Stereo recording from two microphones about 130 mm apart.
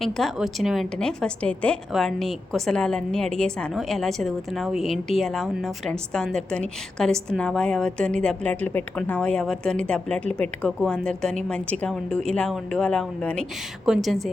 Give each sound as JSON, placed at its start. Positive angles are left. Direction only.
{"t": 0.0, "sound": "a woman's voice", "side_deg": 0}